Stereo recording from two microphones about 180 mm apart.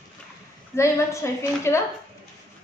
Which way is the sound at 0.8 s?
15° left (ahead or behind).